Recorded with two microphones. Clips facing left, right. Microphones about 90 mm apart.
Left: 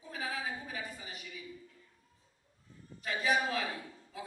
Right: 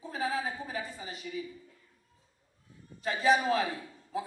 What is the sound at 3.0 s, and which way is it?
Speech, 30° right (ahead or behind).